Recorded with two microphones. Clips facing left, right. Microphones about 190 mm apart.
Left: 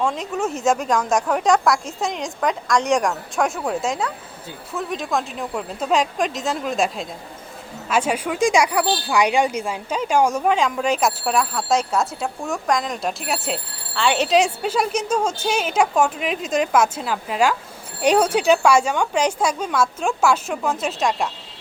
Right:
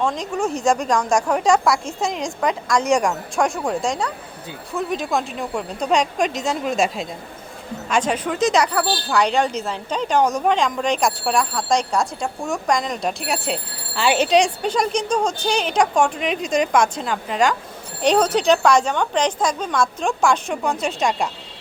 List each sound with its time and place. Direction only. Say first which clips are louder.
0.0 s a woman's voice: right 1 dB; 5° left (ahead or behind)